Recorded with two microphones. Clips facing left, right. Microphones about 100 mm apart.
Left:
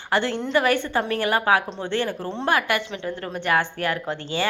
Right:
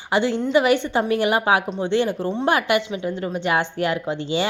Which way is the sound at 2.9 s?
10° right (ahead or behind).